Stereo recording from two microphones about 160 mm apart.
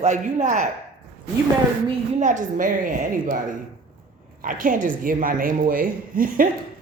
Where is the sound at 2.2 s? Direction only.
50° right (ahead or behind).